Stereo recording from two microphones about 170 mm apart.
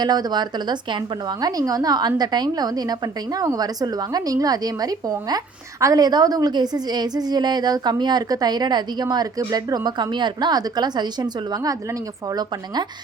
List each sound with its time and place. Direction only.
0.0 s a woman's voice: 25° right (ahead or behind)